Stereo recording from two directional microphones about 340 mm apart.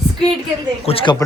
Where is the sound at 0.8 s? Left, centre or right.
Centre.